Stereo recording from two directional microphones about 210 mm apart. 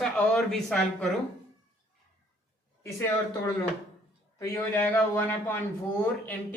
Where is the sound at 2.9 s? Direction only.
15° left (ahead or behind).